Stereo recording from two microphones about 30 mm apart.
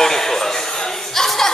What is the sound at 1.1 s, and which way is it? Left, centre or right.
Chuckle, centre.